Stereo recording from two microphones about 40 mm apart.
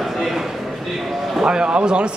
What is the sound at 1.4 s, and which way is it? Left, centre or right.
Speech, right.